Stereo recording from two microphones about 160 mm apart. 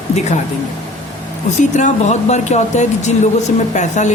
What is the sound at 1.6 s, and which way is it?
Speech, 50° left (ahead or behind).